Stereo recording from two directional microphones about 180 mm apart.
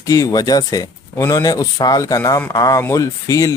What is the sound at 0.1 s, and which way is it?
Speech, 20° left (ahead or behind).